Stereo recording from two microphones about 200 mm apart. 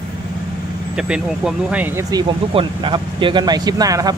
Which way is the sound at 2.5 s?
25° right (ahead or behind).